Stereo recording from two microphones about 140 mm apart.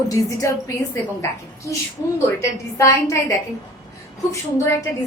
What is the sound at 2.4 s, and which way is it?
Speech, 25° left (ahead or behind).